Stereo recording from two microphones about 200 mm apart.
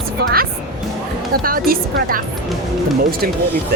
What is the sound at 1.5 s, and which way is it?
Speech, 45° right (ahead or behind).